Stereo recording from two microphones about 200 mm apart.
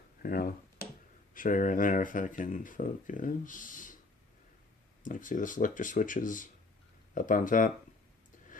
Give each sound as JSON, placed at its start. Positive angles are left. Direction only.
{"t": 0.2, "sound": "a sound", "side_deg": 45}
{"t": 1.3, "sound": "speech", "side_deg": 40}
{"t": 5.0, "sound": "speech", "side_deg": 40}